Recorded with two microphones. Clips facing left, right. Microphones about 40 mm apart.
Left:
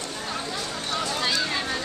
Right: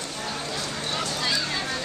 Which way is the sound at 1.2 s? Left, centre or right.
Centre.